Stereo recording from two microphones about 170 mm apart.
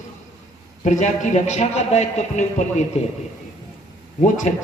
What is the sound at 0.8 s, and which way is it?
A man's voice, 45° left (ahead or behind).